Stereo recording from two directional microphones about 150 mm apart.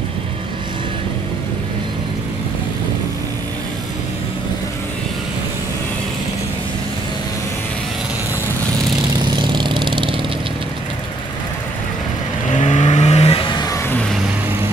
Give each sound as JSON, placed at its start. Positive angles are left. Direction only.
{"t": 9.3, "sound": "vehicle", "side_deg": -30}
{"t": 12.6, "sound": "vehicle", "side_deg": 50}